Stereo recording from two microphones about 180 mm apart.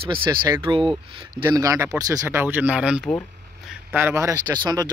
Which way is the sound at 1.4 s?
20° right (ahead or behind).